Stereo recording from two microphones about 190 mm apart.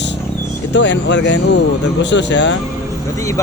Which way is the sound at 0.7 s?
70° left (ahead or behind).